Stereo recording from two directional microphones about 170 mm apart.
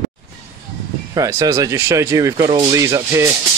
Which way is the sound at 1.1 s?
20° right (ahead or behind).